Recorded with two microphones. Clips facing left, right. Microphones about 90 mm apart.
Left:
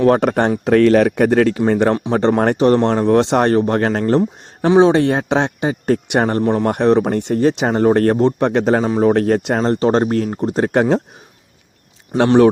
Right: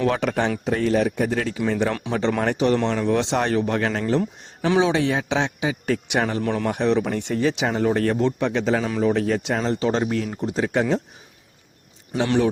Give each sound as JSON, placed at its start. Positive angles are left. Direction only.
{"t": 0.0, "sound": "speech", "side_deg": 45}
{"t": 0.6, "sound": "speech", "side_deg": 70}
{"t": 6.4, "sound": "a man's voice", "side_deg": 30}
{"t": 6.7, "sound": "speech", "side_deg": 50}